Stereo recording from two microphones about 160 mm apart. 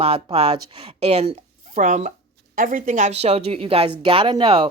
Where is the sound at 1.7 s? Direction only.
50° right (ahead or behind).